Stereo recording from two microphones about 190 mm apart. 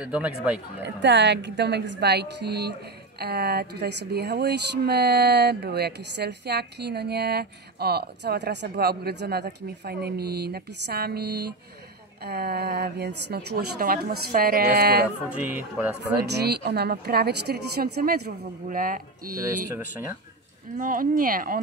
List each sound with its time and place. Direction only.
0.0 s speech: 5° right (ahead or behind)
0.8 s a woman's voice: 65° right (ahead or behind)
15.3 s speech: 10° right (ahead or behind)
16.0 s a woman's voice: 60° right (ahead or behind)
19.4 s speech: 15° right (ahead or behind)
20.7 s speech: 45° right (ahead or behind)